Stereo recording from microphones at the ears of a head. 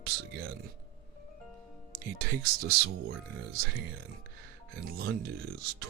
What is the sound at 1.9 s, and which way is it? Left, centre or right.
Speech, right.